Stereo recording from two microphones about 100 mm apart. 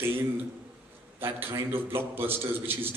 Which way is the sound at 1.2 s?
25° right (ahead or behind).